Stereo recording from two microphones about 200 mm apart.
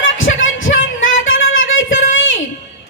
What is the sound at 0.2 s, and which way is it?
Music, 75° left (ahead or behind).